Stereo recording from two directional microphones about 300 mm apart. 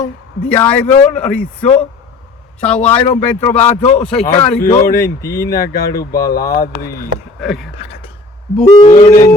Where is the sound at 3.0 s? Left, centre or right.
Centre.